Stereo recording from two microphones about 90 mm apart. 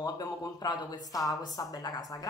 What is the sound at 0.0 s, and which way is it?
A woman's voice, 45° left (ahead or behind).